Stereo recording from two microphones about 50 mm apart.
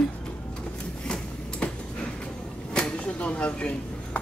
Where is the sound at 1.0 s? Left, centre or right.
Centre.